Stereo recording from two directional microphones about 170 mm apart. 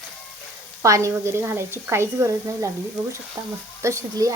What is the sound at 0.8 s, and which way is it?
Speech, 20° right (ahead or behind).